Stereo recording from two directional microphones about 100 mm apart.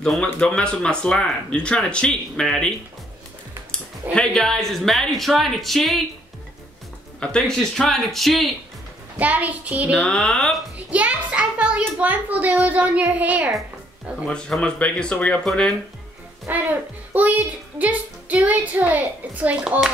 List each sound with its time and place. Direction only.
0.0 s speech: 10° left (ahead or behind)
3.7 s speech: 10° left (ahead or behind)
7.2 s speech: 10° left (ahead or behind)
9.2 s a child's voice: 15° right (ahead or behind)
10.0 s speech: 10° left (ahead or behind)
10.9 s a child's voice: 15° right (ahead or behind)
14.2 s speech: 10° left (ahead or behind)
16.4 s a child's voice: 15° right (ahead or behind)